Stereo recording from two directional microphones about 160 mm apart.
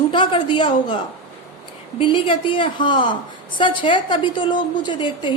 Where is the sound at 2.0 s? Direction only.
30° left (ahead or behind).